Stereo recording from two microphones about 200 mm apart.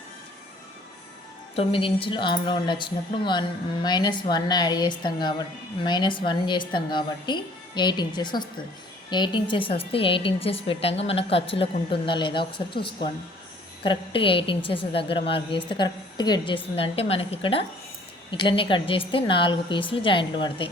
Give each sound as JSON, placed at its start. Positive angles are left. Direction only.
{"t": 1.5, "sound": "a woman's voice", "side_deg": 25}
{"t": 13.8, "sound": "a woman's voice", "side_deg": 25}